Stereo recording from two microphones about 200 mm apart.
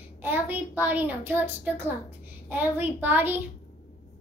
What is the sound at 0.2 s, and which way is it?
A woman's voice, 10° right (ahead or behind).